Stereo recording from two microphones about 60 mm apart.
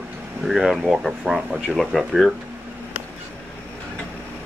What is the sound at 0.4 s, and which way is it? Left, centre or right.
Speech, centre.